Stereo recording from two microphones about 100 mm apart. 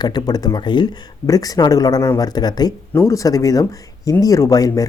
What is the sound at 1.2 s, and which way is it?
Speech, 40° left (ahead or behind).